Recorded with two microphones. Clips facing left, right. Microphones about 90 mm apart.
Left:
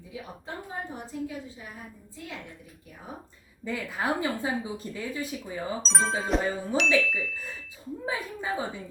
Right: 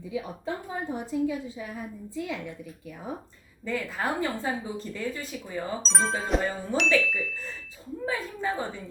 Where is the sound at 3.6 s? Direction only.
5° left (ahead or behind).